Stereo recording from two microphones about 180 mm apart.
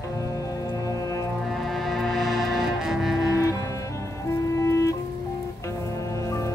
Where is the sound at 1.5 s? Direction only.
Centre (ahead or behind).